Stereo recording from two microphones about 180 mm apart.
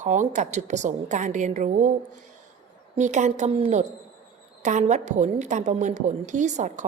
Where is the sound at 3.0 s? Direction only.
40° right (ahead or behind).